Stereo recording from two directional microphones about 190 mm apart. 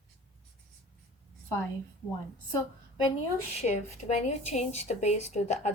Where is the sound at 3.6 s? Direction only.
35° left (ahead or behind).